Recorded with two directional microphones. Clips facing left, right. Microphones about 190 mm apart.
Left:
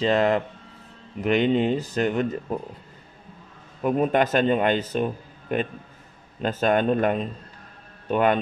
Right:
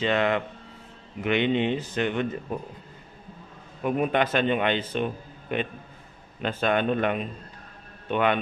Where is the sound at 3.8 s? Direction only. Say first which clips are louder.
Left 3 dB; 40° left (ahead or behind).